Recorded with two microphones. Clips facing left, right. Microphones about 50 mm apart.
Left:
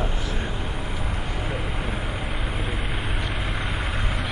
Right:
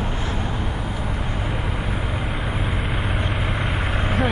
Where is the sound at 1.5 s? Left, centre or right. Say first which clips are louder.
Right 2 dB; centre.